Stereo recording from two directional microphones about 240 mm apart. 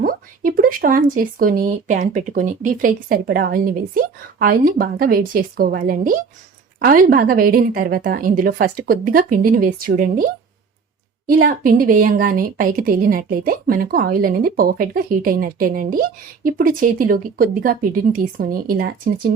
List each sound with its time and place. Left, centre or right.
0.0 s a woman's voice: right
11.3 s a woman's voice: right